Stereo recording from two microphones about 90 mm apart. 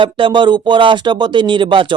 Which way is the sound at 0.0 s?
65° right (ahead or behind).